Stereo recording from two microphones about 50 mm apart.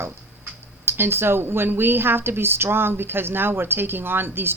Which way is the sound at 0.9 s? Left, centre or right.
Right.